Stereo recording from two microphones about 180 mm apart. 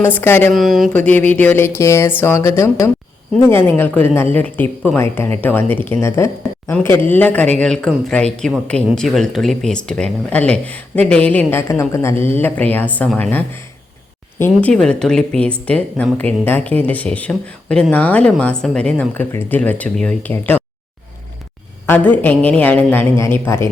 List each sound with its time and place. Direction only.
0.0 s speech: 10° left (ahead or behind)
0.5 s speech: centre (ahead or behind)
21.8 s speech: 10° left (ahead or behind)